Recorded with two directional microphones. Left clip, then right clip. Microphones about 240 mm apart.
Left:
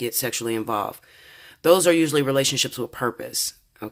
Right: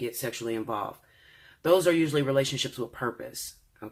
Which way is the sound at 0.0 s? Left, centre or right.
Left.